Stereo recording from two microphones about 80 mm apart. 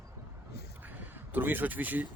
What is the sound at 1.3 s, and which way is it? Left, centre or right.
Speech, right.